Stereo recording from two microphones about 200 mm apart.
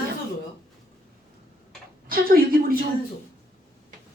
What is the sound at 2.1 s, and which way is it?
Speech, 45° right (ahead or behind).